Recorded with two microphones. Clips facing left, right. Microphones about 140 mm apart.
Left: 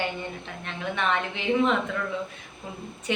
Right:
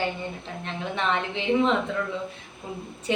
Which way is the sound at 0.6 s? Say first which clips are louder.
Even; 30° right (ahead or behind).